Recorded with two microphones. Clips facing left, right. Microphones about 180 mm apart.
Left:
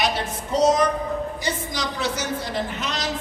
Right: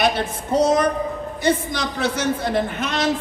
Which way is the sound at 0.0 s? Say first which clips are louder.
Right 4 dB; 55° right (ahead or behind).